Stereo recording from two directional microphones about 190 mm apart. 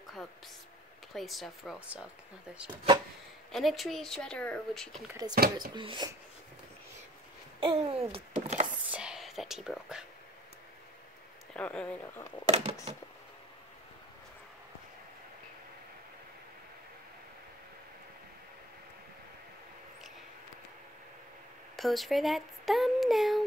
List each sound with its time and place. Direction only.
1.1 s speech: centre (ahead or behind)
3.5 s speech: centre (ahead or behind)
5.3 s speech: 45° right (ahead or behind)
5.8 s speech: 25° right (ahead or behind)
7.6 s a sound: 30° right (ahead or behind)
8.9 s whispering: 5° right (ahead or behind)
11.5 s speech: 5° left (ahead or behind)
12.4 s a sound: 35° right (ahead or behind)
21.7 s speech: centre (ahead or behind)